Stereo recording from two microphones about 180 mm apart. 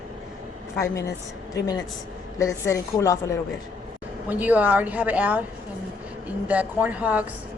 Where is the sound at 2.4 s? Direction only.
20° left (ahead or behind).